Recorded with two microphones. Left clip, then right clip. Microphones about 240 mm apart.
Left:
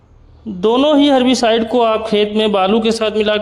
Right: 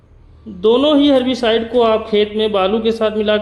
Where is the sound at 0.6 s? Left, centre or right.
Left.